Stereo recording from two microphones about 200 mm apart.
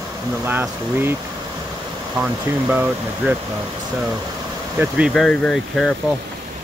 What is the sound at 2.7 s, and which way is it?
Speech, 10° right (ahead or behind).